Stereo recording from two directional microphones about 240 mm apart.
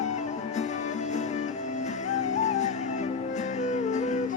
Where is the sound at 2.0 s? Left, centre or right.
Left.